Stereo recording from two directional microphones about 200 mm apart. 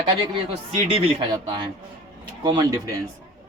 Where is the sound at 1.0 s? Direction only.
25° right (ahead or behind).